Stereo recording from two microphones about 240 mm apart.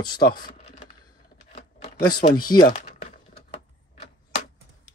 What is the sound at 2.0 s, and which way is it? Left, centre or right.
Speech, centre.